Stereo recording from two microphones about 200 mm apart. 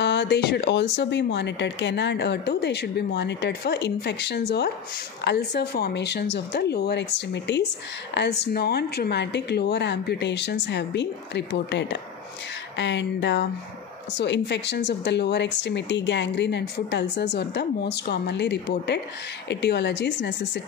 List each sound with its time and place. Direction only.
0.0 s speech: 60° left (ahead or behind)